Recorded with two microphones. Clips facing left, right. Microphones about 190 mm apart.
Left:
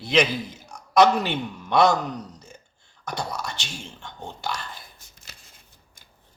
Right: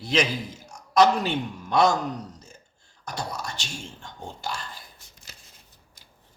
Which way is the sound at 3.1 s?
65° left (ahead or behind).